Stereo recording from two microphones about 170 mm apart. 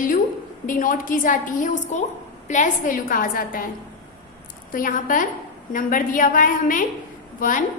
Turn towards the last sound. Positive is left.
turn(degrees=50)  # may be behind; listen again after turning